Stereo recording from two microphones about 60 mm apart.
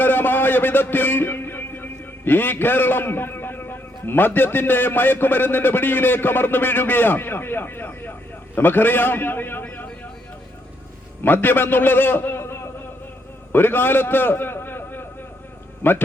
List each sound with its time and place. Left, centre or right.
0.0 s a man's voice: left
9.6 s a sound: left
11.2 s a man's voice: left